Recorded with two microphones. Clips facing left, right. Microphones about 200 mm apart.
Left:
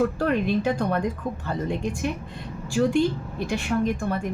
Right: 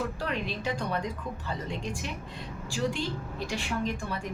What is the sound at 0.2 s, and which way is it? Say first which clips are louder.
A woman's voice: left 10 dB; 50° left (ahead or behind).